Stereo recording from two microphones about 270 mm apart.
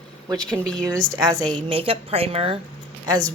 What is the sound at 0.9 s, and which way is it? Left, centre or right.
Speech, centre.